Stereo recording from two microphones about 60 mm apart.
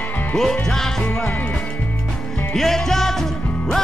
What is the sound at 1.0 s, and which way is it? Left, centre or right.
Music, centre.